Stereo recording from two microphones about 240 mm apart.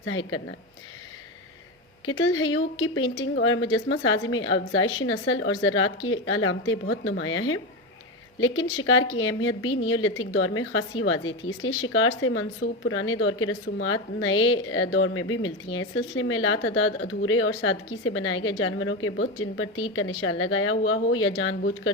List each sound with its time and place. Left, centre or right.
0.0 s a woman's voice: left
2.0 s a woman's voice: left